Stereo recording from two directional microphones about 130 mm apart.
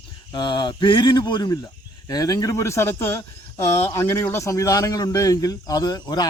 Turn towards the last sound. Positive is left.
turn(degrees=30)  # may be behind; listen again after turning